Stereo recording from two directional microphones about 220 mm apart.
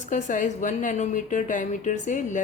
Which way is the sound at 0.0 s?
35° left (ahead or behind).